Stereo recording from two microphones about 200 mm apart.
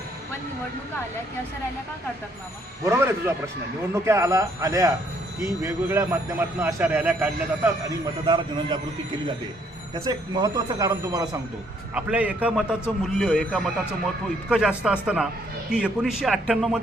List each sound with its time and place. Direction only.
2.8 s speech: 15° right (ahead or behind)
10.1 s speech: 20° right (ahead or behind)
11.9 s a man's voice: 5° right (ahead or behind)